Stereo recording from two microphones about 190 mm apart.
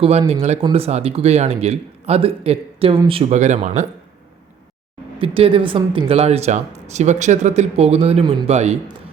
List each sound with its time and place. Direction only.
0.0 s speech: 30° right (ahead or behind)
5.2 s speech: 30° right (ahead or behind)